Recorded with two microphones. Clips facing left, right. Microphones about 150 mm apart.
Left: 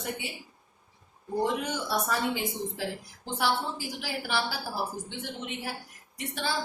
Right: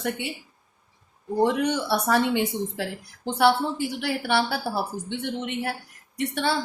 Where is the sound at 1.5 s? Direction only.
70° right (ahead or behind).